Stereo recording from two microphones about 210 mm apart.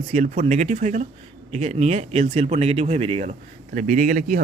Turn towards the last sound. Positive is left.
turn(degrees=-40)  # may be behind; listen again after turning